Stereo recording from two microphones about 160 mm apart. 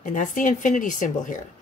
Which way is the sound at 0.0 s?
55° left (ahead or behind).